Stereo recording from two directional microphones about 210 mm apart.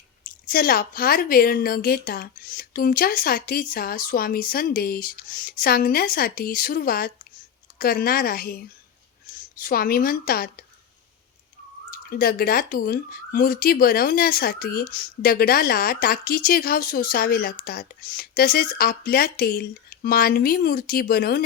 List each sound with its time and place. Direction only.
0.3 s speech: 45° left (ahead or behind)
11.9 s speech: 45° left (ahead or behind)